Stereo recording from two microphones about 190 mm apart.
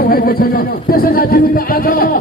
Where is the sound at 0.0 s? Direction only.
50° left (ahead or behind).